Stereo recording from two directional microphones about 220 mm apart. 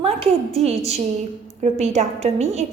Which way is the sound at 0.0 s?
25° right (ahead or behind).